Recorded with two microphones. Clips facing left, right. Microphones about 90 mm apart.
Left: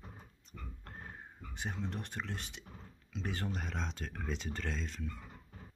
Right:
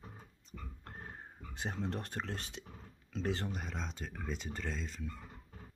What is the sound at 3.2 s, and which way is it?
Speech, 25° right (ahead or behind).